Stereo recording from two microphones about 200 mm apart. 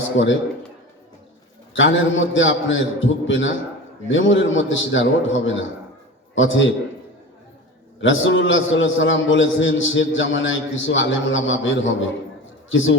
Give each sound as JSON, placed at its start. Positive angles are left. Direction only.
{"t": 0.2, "sound": "a man's voice", "side_deg": 65}
{"t": 1.7, "sound": "a man's voice", "side_deg": 70}
{"t": 8.0, "sound": "a man's voice", "side_deg": 70}